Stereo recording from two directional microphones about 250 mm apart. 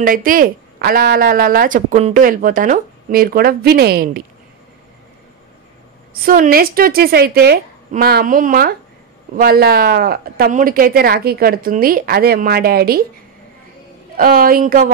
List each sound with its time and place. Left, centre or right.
0.0 s speech: right
6.2 s speech: right
14.1 s speech: right